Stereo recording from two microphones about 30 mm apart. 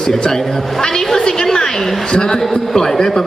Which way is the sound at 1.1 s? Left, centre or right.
Centre.